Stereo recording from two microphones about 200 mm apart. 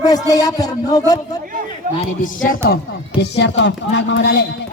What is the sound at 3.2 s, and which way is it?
Speech, 60° left (ahead or behind).